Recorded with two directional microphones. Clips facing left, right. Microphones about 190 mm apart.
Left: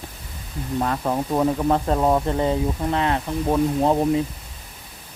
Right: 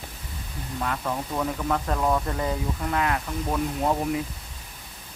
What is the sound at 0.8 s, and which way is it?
Speech, 40° left (ahead or behind).